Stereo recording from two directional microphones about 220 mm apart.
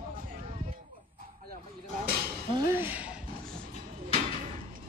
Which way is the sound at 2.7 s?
10° right (ahead or behind).